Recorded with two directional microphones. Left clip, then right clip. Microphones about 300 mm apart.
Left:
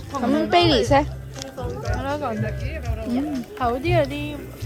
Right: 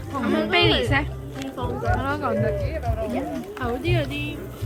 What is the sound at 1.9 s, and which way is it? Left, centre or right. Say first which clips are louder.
Speech: right 1 dB; centre.